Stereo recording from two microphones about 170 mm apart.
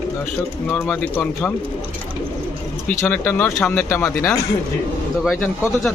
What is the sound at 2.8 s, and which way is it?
Speech, 10° left (ahead or behind).